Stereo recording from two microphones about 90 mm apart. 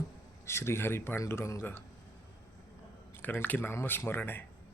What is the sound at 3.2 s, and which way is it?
Speech, 20° left (ahead or behind).